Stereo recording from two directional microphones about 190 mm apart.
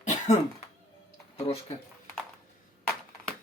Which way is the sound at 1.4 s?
30° left (ahead or behind).